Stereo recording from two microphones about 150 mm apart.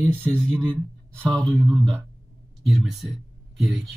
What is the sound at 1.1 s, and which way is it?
Speech, 5° left (ahead or behind).